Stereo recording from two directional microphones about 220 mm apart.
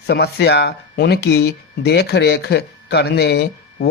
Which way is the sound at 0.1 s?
50° left (ahead or behind).